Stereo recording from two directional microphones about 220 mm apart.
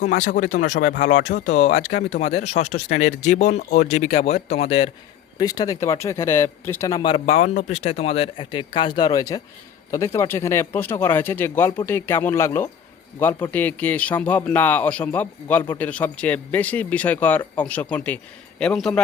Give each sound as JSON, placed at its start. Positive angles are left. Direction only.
{"t": 0.0, "sound": "speech", "side_deg": 35}
{"t": 5.4, "sound": "a man's voice", "side_deg": 15}
{"t": 7.3, "sound": "a man's voice", "side_deg": 35}